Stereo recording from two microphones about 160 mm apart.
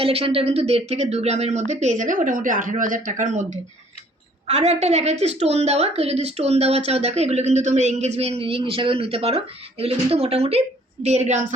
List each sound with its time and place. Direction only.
0.0 s a woman's voice: 35° right (ahead or behind)